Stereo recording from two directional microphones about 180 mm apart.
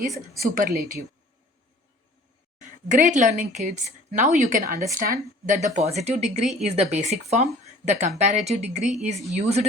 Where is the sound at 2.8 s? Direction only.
45° right (ahead or behind).